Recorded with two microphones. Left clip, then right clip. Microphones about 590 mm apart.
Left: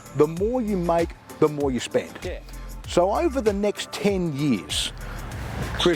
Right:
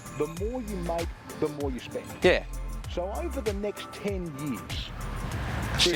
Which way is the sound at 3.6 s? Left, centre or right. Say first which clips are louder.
Left 9 dB; left.